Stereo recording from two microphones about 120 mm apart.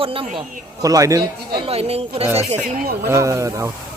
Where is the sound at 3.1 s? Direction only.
25° right (ahead or behind).